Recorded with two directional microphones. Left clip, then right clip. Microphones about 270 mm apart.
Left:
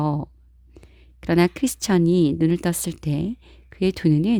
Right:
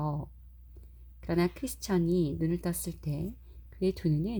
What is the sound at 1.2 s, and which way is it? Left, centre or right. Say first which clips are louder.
Speech: left 11 dB; left.